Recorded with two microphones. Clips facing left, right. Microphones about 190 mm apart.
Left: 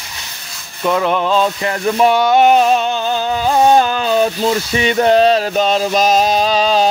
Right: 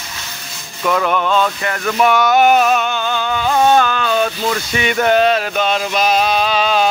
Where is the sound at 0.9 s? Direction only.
25° left (ahead or behind).